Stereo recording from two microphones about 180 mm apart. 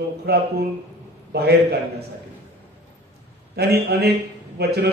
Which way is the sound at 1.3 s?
65° right (ahead or behind).